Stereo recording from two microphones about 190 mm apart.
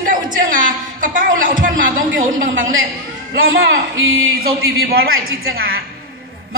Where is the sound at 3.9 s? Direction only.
90° right.